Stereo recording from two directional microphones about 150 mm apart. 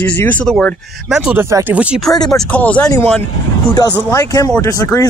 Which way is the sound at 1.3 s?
15° right (ahead or behind).